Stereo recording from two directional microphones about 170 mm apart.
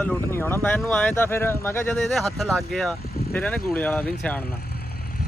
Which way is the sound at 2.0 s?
Centre (ahead or behind).